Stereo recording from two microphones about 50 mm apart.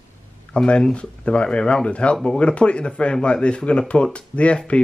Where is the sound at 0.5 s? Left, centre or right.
Centre.